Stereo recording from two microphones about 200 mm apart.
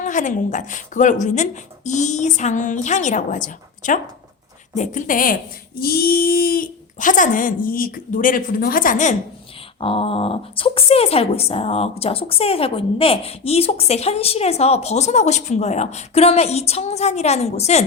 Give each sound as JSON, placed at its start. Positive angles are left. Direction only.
{"t": 0.0, "sound": "speech", "side_deg": 40}
{"t": 9.8, "sound": "speech", "side_deg": 25}